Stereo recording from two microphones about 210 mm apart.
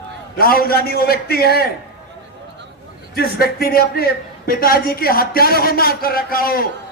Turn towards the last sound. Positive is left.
turn(degrees=45)  # may be behind; listen again after turning